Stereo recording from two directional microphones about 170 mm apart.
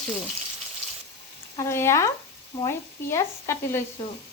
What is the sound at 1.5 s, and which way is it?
Speech, 15° left (ahead or behind).